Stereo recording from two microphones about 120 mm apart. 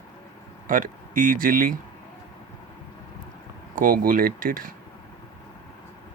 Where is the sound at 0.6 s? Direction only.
90° right.